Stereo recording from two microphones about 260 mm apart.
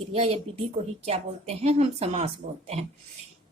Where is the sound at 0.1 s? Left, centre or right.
Right.